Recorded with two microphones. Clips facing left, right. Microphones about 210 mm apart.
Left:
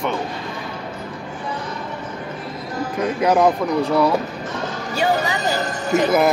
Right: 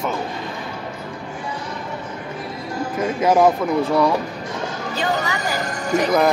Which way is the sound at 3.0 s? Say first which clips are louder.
Right 1 dB; centre (ahead or behind).